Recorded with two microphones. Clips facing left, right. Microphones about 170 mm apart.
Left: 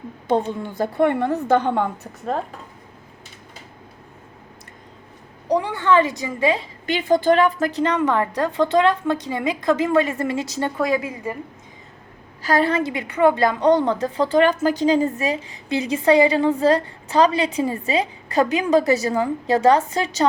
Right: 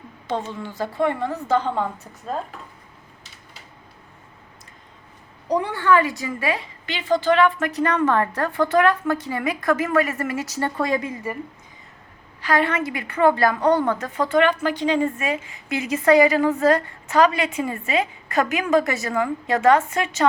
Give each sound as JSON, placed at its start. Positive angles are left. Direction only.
{"t": 0.3, "sound": "a woman's voice", "side_deg": 55}
{"t": 5.5, "sound": "a woman's voice", "side_deg": 10}
{"t": 6.8, "sound": "a woman's voice", "side_deg": 50}
{"t": 7.7, "sound": "a woman's voice", "side_deg": 25}
{"t": 7.9, "sound": "a woman's voice", "side_deg": 15}
{"t": 10.8, "sound": "a woman's voice", "side_deg": 5}
{"t": 12.4, "sound": "a woman's voice", "side_deg": 40}